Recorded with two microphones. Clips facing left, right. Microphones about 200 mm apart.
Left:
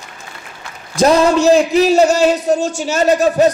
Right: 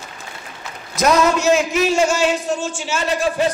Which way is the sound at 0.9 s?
30° left (ahead or behind).